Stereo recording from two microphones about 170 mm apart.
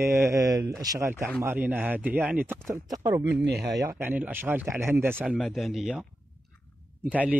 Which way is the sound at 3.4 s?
75° right (ahead or behind).